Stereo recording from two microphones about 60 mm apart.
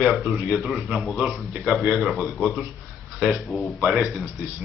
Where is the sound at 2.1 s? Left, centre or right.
Centre.